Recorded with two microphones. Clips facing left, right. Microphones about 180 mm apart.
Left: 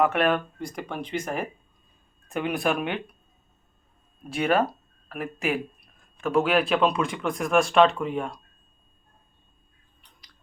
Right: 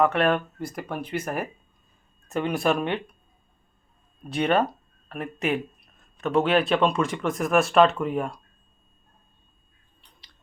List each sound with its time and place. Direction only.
0.0 s speech: 5° left (ahead or behind)
4.3 s speech: 5° left (ahead or behind)